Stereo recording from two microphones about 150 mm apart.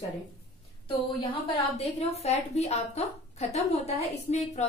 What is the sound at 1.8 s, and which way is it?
A woman's voice, 45° left (ahead or behind).